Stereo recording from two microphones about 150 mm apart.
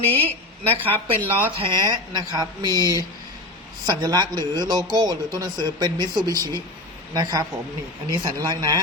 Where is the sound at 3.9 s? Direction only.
25° right (ahead or behind).